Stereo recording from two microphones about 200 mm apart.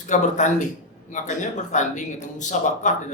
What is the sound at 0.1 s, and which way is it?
Speech, 35° left (ahead or behind).